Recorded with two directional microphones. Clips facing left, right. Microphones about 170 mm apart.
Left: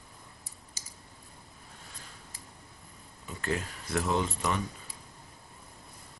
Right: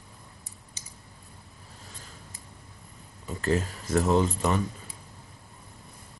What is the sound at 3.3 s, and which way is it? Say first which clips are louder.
Speech: right 6 dB; 35° right (ahead or behind).